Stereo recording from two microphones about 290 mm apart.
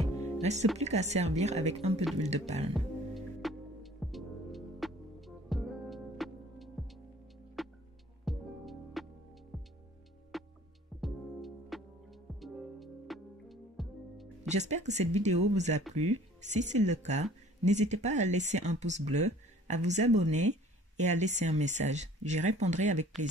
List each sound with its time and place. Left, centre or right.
0.4 s speech: right
2.7 s music: centre
14.5 s speech: right